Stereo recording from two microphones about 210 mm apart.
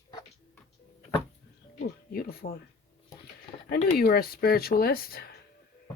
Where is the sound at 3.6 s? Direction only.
45° left (ahead or behind).